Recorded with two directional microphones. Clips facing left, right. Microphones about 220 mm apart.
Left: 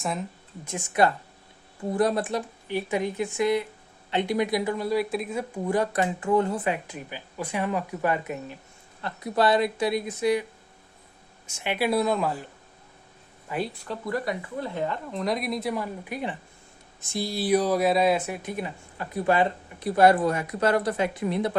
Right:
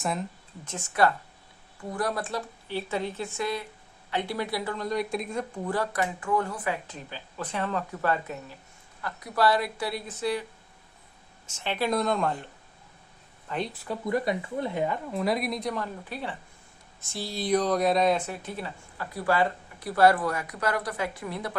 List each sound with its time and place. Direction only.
0.0 s speech: centre (ahead or behind)
0.6 s speech: 15° left (ahead or behind)
11.4 s speech: 10° left (ahead or behind)
13.5 s speech: 5° left (ahead or behind)
14.0 s speech: 20° right (ahead or behind)
14.8 s speech: 10° right (ahead or behind); by 21.5 s 20° left (ahead or behind)